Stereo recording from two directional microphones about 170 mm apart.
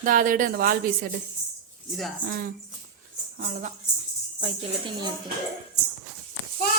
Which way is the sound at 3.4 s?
45° right (ahead or behind).